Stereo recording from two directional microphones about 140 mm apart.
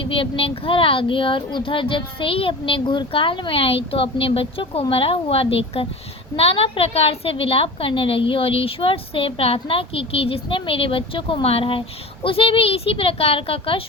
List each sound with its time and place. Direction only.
0.0 s speech: 40° left (ahead or behind)